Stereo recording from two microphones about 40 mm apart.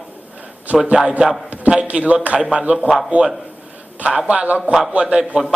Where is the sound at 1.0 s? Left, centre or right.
Centre.